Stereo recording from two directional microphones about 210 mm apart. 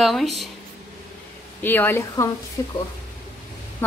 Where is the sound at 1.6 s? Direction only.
10° left (ahead or behind).